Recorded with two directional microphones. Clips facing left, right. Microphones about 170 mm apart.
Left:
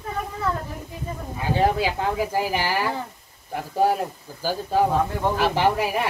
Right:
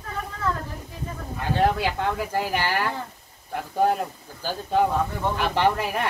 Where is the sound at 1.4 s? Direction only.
10° left (ahead or behind).